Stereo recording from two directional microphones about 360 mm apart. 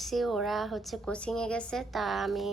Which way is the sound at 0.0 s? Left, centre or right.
Centre.